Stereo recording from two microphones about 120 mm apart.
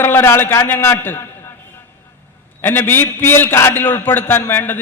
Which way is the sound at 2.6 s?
15° left (ahead or behind).